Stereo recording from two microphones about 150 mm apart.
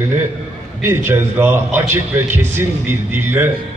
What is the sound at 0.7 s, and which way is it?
A man's voice, 15° right (ahead or behind).